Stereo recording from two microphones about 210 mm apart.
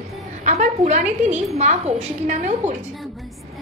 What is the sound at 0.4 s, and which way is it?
A woman's voice, 35° right (ahead or behind).